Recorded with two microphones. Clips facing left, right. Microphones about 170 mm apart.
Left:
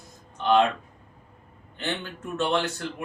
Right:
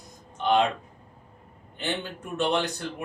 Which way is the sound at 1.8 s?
15° right (ahead or behind).